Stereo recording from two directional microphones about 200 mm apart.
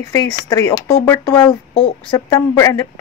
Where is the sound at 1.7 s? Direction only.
25° left (ahead or behind).